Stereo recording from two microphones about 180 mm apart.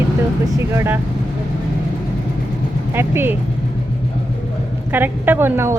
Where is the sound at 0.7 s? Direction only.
15° right (ahead or behind).